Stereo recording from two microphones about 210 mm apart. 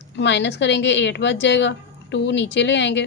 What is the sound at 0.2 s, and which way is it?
A woman's voice, 55° left (ahead or behind).